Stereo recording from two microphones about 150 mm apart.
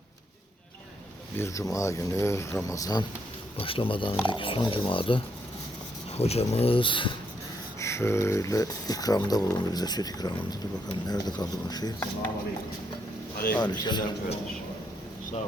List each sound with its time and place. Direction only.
1.4 s speech: 20° left (ahead or behind)
3.6 s speech: 35° left (ahead or behind)
7.8 s speech: 20° left (ahead or behind)
13.6 s speech: 30° left (ahead or behind)